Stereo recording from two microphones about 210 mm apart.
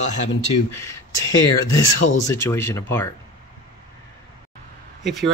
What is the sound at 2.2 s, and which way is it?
Speech, 15° left (ahead or behind).